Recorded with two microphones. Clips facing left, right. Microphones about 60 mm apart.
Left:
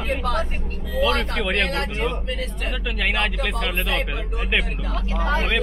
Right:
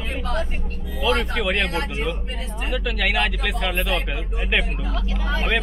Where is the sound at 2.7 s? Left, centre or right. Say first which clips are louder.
Right 3 dB; centre.